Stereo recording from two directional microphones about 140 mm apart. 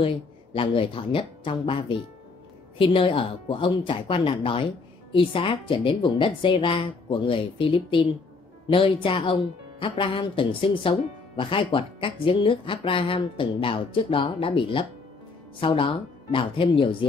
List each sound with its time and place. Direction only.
0.0 s speech: 40° left (ahead or behind)